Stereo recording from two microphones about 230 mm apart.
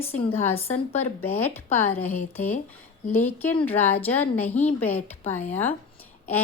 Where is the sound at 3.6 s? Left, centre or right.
Centre.